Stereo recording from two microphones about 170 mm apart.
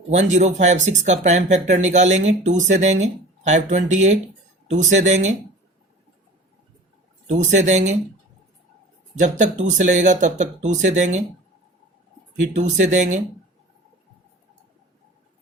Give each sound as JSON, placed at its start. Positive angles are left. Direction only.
{"t": 0.1, "sound": "speech", "side_deg": -45}
{"t": 7.3, "sound": "speech", "side_deg": -45}
{"t": 9.1, "sound": "speech", "side_deg": -45}
{"t": 12.5, "sound": "speech", "side_deg": -45}